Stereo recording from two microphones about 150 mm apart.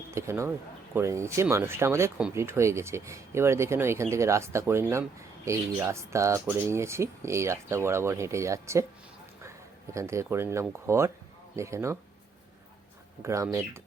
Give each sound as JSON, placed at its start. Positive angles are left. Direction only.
{"t": 0.1, "sound": "speech", "side_deg": -20}
{"t": 9.9, "sound": "speech", "side_deg": -20}
{"t": 13.2, "sound": "speech", "side_deg": -20}